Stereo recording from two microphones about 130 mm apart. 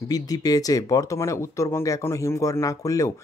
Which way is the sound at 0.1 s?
30° left (ahead or behind).